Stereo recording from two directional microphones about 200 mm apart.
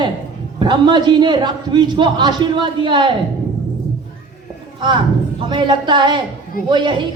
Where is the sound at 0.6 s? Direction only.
25° right (ahead or behind).